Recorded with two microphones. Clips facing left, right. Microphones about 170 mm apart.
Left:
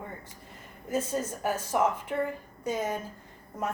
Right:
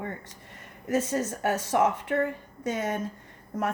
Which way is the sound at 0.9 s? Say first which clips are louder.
Right 3 dB; 85° right.